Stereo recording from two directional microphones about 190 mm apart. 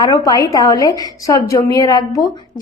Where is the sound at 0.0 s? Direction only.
20° left (ahead or behind).